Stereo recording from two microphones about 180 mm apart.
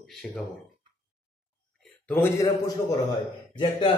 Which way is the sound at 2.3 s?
20° left (ahead or behind).